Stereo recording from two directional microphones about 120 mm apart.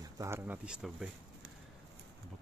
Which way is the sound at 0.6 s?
5° right (ahead or behind).